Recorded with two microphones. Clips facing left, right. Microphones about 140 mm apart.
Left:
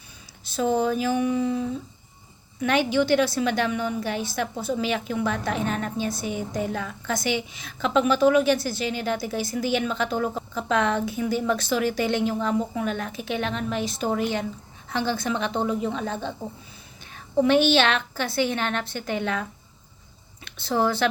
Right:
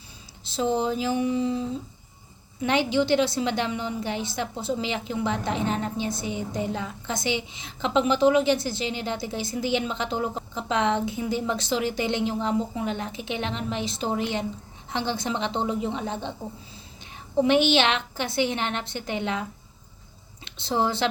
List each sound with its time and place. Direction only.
0.4 s a woman's voice: 25° right (ahead or behind)
17.4 s a woman's voice: 20° right (ahead or behind)